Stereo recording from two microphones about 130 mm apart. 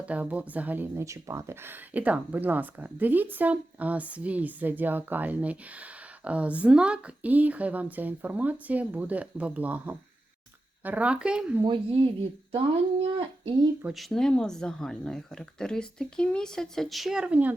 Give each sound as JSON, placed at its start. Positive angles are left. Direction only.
{"t": 0.0, "sound": "speech", "side_deg": -10}
{"t": 11.6, "sound": "speech", "side_deg": -40}
{"t": 13.8, "sound": "speech", "side_deg": 0}